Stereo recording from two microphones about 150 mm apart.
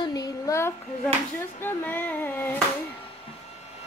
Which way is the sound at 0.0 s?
25° left (ahead or behind).